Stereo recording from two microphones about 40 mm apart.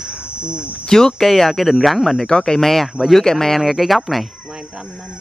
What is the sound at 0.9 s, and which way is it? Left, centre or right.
Speech, centre.